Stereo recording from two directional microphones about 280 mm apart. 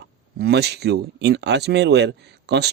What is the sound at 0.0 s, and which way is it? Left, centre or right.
Speech, right.